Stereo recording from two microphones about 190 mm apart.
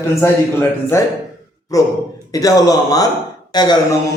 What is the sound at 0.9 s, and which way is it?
Speech, 15° left (ahead or behind).